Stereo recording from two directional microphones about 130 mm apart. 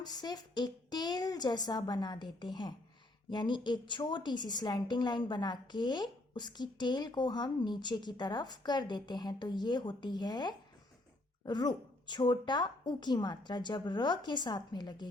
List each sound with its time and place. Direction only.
0.0 s a woman's voice: 30° left (ahead or behind)